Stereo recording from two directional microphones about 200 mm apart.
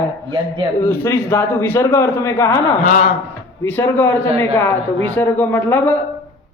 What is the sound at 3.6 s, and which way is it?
Speech, 10° left (ahead or behind).